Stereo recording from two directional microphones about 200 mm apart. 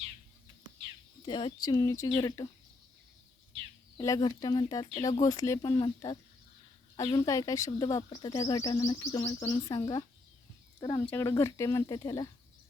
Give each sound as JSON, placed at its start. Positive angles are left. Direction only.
{"t": 1.2, "sound": "speech", "side_deg": 25}
{"t": 3.9, "sound": "speech", "side_deg": 15}